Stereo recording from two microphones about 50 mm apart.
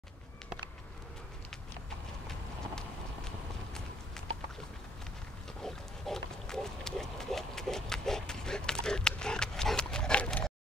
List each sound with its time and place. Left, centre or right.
5.6 s pig: centre